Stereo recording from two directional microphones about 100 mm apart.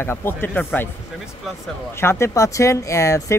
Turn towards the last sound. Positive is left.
turn(degrees=30)  # may be behind; listen again after turning